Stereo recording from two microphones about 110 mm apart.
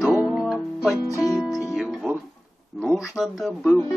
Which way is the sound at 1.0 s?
30° left (ahead or behind).